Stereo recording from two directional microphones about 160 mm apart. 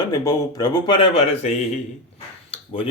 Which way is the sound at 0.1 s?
20° left (ahead or behind).